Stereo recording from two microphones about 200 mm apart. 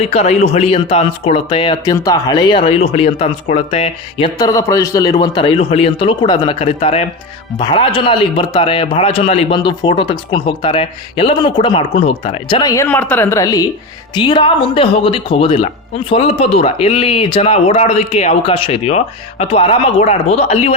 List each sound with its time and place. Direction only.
0.0 s speech: 30° left (ahead or behind)